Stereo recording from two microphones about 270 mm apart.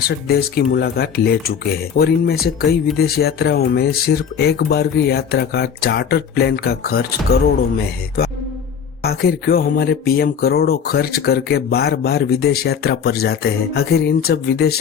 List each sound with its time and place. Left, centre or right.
0.3 s speech: left